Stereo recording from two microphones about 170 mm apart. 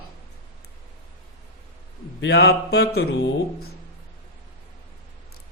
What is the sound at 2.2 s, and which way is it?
Speech, 80° left.